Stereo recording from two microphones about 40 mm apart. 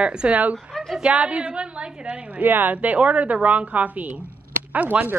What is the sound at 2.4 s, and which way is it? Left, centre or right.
Speech, right.